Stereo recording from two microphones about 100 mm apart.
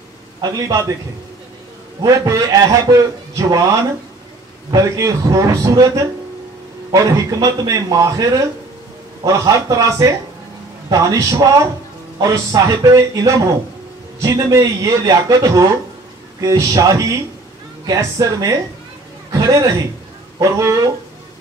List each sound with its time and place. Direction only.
0.4 s a man's voice: 35° right (ahead or behind)
2.0 s a man's voice: 35° right (ahead or behind)